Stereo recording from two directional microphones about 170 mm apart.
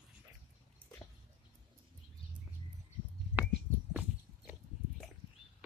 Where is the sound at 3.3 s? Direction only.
10° right (ahead or behind).